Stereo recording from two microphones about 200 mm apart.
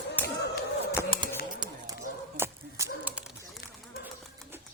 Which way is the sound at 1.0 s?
20° right (ahead or behind).